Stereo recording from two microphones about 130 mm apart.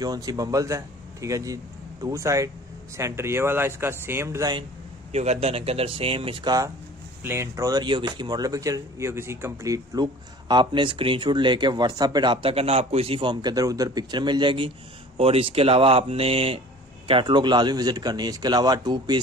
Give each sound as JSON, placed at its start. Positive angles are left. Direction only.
{"t": 0.0, "sound": "speech", "side_deg": -30}
{"t": 5.1, "sound": "speech", "side_deg": -55}
{"t": 7.2, "sound": "speech", "side_deg": -20}
{"t": 10.5, "sound": "speech", "side_deg": -35}